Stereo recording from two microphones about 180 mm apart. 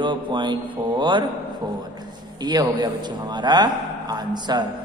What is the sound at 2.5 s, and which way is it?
A man's voice, 20° right (ahead or behind).